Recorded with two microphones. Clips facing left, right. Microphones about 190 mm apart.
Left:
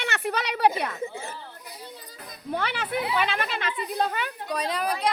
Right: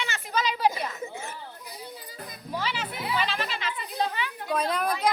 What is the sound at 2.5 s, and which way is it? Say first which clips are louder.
A woman's voice: left 4 dB; 60° left (ahead or behind).